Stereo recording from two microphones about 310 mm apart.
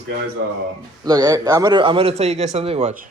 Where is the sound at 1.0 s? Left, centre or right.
Centre.